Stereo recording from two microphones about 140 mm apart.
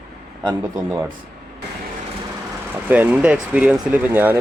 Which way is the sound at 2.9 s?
10° right (ahead or behind).